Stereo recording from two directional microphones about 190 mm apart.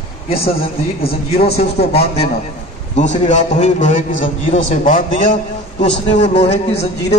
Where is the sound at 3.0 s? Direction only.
40° left (ahead or behind).